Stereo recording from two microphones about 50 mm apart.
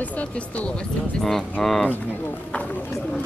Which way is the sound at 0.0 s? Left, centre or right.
Left.